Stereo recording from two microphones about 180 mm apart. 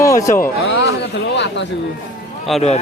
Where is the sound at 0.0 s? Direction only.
20° left (ahead or behind).